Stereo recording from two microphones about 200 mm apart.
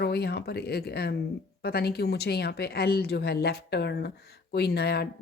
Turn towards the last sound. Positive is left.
turn(degrees=55)  # may be behind; listen again after turning